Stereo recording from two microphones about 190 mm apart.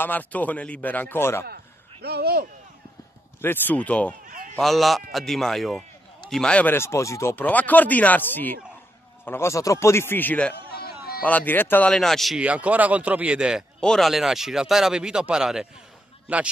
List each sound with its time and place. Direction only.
0.0 s a man's voice: 10° left (ahead or behind)
1.4 s speech: 55° right (ahead or behind)
3.3 s a man's voice: 10° left (ahead or behind)
4.3 s a sound: 45° right (ahead or behind)
4.6 s a man's voice: centre (ahead or behind)
10.8 s a sound: 55° left (ahead or behind)
11.2 s speech: 10° left (ahead or behind)